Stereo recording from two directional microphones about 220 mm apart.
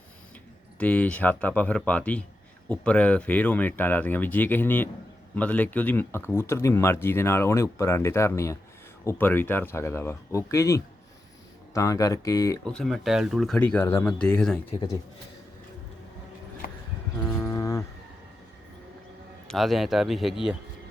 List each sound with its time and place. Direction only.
0.8 s speech: 5° left (ahead or behind)
12.6 s speech: 5° left (ahead or behind)
17.2 s a sound: 10° left (ahead or behind)
19.5 s speech: centre (ahead or behind)